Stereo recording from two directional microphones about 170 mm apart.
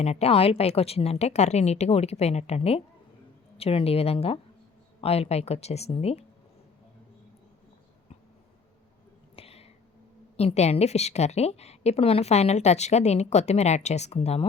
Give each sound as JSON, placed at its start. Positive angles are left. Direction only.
{"t": 0.0, "sound": "a woman's voice", "side_deg": 40}
{"t": 9.3, "sound": "a sound", "side_deg": 35}
{"t": 10.3, "sound": "a woman's voice", "side_deg": 40}